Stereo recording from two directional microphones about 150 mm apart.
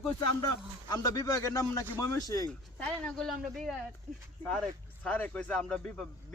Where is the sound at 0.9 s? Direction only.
25° left (ahead or behind).